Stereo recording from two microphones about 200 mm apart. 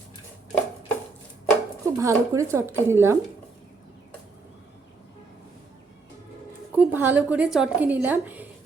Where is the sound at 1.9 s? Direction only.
15° right (ahead or behind).